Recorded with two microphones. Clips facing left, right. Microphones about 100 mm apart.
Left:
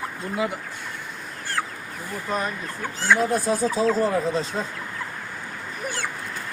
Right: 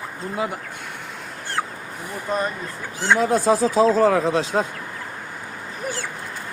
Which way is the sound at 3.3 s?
90° right.